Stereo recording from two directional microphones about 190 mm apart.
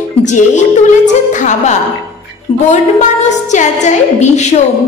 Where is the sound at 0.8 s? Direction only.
40° left (ahead or behind).